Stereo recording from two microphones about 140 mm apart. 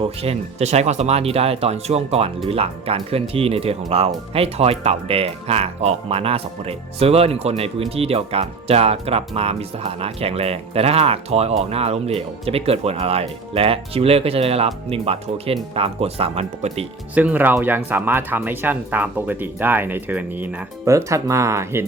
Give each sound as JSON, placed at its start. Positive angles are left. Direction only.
{"t": 0.0, "sound": "speech", "side_deg": -45}
{"t": 17.2, "sound": "speech", "side_deg": -10}